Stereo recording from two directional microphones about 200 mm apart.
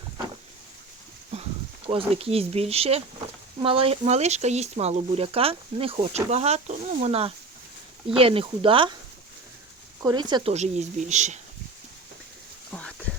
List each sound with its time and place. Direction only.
1.9 s speech: 30° right (ahead or behind)
10.0 s speech: 20° right (ahead or behind)
10.5 s speech: 35° right (ahead or behind)
12.7 s a sound: 5° left (ahead or behind)